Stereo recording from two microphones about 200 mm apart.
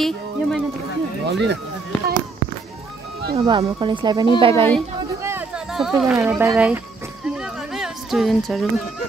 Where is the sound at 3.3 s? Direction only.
25° right (ahead or behind).